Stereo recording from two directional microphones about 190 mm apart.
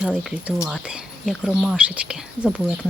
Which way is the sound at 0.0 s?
5° right (ahead or behind).